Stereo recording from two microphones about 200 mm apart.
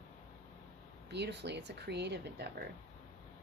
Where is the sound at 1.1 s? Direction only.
60° right (ahead or behind).